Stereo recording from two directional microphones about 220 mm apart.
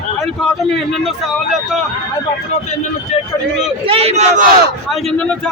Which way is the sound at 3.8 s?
25° right (ahead or behind).